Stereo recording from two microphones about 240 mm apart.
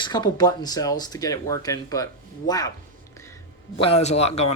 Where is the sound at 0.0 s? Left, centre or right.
Centre.